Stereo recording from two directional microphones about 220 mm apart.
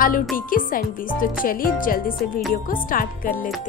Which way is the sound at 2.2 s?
Centre (ahead or behind).